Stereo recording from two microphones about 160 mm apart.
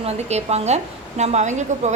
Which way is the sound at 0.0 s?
40° right (ahead or behind).